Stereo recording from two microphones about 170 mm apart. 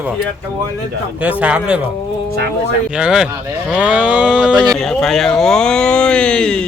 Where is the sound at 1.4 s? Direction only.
5° right (ahead or behind).